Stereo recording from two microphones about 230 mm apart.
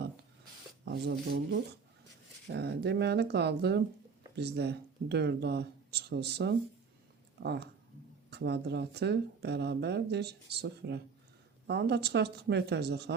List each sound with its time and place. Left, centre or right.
0.9 s speech: right